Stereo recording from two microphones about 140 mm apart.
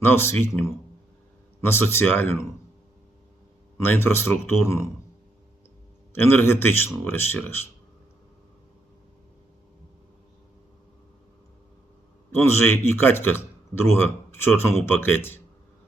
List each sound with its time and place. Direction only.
0.0 s speech: 15° left (ahead or behind)
1.6 s speech: 15° left (ahead or behind)
3.8 s speech: 15° left (ahead or behind)
6.1 s speech: 15° left (ahead or behind)
12.4 s speech: 20° left (ahead or behind)